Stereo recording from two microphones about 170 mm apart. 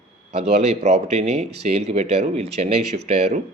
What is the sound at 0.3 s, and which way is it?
Speech, 40° right (ahead or behind).